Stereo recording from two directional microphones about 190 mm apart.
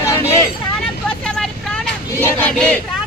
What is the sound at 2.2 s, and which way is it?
Crowd, 5° left (ahead or behind).